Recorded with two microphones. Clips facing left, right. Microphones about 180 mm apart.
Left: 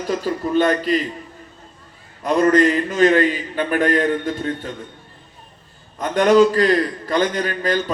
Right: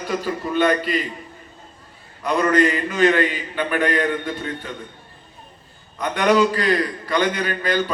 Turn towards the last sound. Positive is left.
turn(degrees=40)  # may be behind; listen again after turning